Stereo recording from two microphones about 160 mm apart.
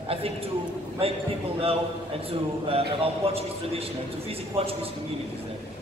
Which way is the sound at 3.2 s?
35° right (ahead or behind).